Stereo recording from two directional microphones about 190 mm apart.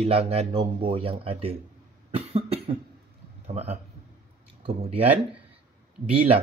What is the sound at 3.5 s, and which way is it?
Speech, 35° right (ahead or behind).